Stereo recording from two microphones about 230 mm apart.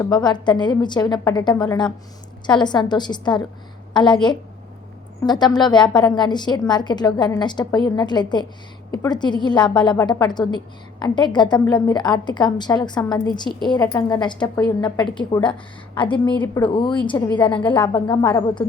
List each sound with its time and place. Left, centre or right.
0.0 s a woman's voice: centre